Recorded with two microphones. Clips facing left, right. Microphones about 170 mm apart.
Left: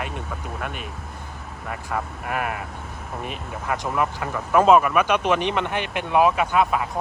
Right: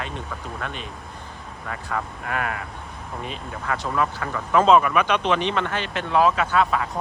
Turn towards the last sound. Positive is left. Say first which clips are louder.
# left 1 dB
turn(degrees=10)  # may be behind; listen again after turning